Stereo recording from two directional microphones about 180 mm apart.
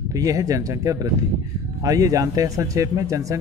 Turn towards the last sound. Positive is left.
turn(degrees=-15)  # may be behind; listen again after turning